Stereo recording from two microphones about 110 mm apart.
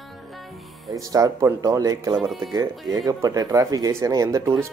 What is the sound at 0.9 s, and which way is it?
Speech, 30° right (ahead or behind).